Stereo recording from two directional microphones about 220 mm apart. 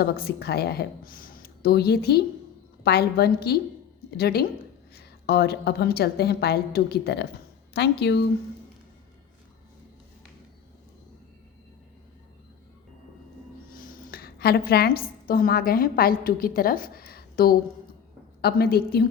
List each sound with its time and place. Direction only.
0.0 s a woman's voice: 45° left (ahead or behind)
13.7 s a woman's voice: 40° left (ahead or behind)